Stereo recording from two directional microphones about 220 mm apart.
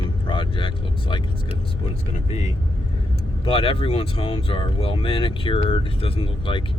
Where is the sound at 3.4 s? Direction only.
25° left (ahead or behind).